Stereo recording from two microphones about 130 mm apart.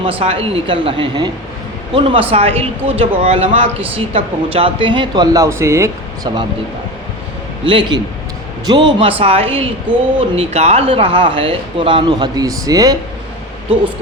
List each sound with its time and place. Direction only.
0.0 s a man's voice: 45° right (ahead or behind)
2.3 s speech: 50° right (ahead or behind); by 6.3 s 25° right (ahead or behind)
7.6 s a man's voice: 40° right (ahead or behind)